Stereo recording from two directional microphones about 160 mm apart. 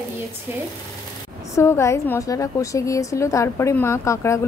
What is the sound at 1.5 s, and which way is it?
A woman's voice, 15° left (ahead or behind).